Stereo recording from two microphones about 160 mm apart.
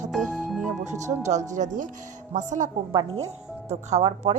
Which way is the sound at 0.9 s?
45° right (ahead or behind).